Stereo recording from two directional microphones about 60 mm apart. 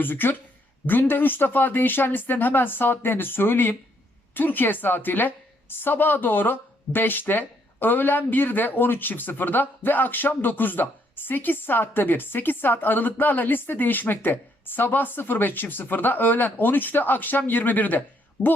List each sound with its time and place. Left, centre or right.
0.0 s a woman's voice: left
18.4 s a woman's voice: centre